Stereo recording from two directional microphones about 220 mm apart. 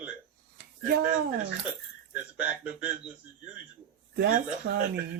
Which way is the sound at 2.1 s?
5° right (ahead or behind).